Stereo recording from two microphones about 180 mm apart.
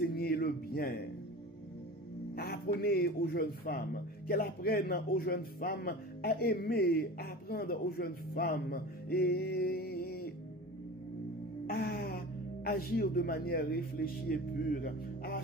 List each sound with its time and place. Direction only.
0.0 s music: 55° left (ahead or behind)
2.3 s a man's voice: 60° left (ahead or behind)
11.6 s music: 55° left (ahead or behind)
12.6 s a man's voice: 55° left (ahead or behind)